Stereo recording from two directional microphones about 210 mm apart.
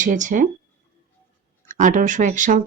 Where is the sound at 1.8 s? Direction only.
35° right (ahead or behind).